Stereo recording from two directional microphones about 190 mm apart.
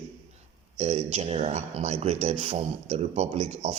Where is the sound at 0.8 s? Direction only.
35° right (ahead or behind).